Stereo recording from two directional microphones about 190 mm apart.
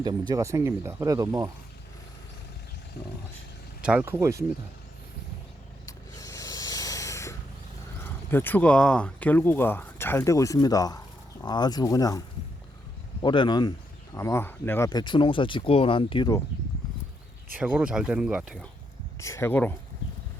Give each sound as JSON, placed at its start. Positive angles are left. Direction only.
{"t": 0.0, "sound": "speech", "side_deg": -20}
{"t": 3.8, "sound": "speech", "side_deg": -5}
{"t": 5.8, "sound": "a sound", "side_deg": 15}
{"t": 8.0, "sound": "speech", "side_deg": 10}
{"t": 13.2, "sound": "speech", "side_deg": 25}
{"t": 14.8, "sound": "speech", "side_deg": 25}
{"t": 17.6, "sound": "speech", "side_deg": -5}
{"t": 19.2, "sound": "speech", "side_deg": 15}